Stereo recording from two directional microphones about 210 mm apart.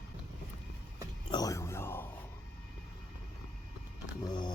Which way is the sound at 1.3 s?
15° left (ahead or behind).